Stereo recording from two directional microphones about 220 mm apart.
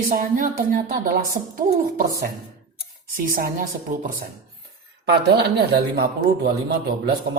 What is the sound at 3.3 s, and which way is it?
Speech, 40° right (ahead or behind).